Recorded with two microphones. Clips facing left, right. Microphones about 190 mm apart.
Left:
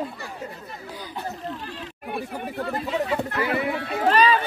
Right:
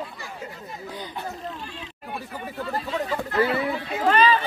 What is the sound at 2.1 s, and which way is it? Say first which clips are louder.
Speech: left 4 dB; 60° left (ahead or behind).